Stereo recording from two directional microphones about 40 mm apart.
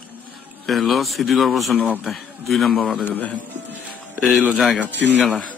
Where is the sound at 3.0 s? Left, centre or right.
Left.